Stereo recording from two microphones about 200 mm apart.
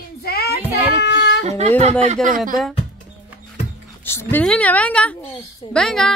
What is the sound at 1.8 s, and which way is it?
Speech, 35° right (ahead or behind).